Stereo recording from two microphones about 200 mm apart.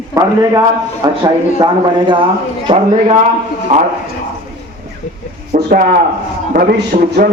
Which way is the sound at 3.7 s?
40° right (ahead or behind).